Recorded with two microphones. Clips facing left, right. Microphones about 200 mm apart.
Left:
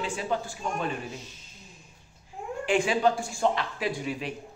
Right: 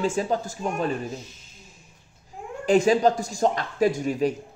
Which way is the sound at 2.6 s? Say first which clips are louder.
Right 6 dB; 40° right (ahead or behind).